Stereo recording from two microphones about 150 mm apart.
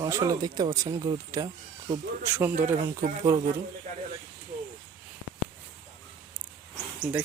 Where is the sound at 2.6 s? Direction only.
60° right (ahead or behind).